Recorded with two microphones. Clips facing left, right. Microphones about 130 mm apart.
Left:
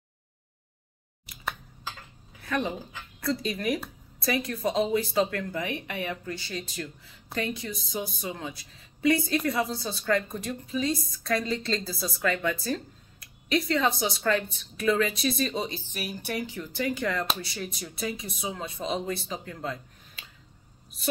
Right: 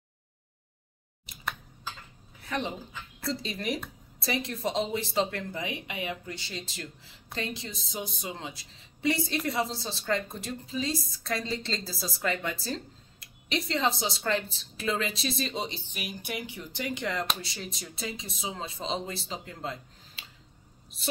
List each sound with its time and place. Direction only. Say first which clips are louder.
2.4 s speech: left 3 dB; 25° right (ahead or behind)
15.9 s speech: left 4 dB; 15° right (ahead or behind)